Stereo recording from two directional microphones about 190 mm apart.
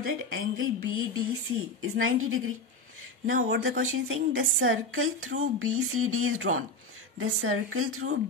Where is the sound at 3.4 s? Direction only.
65° right (ahead or behind).